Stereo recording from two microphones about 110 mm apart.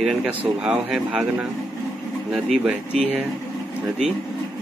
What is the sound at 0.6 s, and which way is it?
Speech, 5° right (ahead or behind).